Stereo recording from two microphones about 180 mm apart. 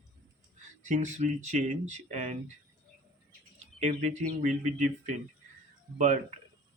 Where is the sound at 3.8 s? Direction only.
40° right (ahead or behind).